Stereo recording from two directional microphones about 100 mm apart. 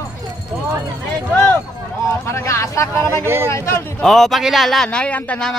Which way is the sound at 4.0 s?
Centre (ahead or behind).